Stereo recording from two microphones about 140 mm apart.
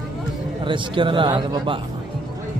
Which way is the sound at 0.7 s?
35° right (ahead or behind).